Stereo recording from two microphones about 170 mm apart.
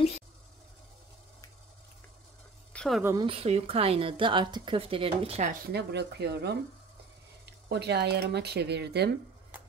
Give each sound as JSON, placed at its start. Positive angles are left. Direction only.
{"t": 2.7, "sound": "a sound", "side_deg": 5}
{"t": 3.0, "sound": "speech", "side_deg": -15}
{"t": 3.3, "sound": "speech", "side_deg": -35}
{"t": 5.5, "sound": "speech", "side_deg": -70}
{"t": 7.7, "sound": "speech", "side_deg": -75}